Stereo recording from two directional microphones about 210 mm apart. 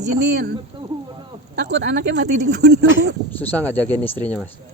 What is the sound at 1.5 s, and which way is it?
Speech, 55° right (ahead or behind).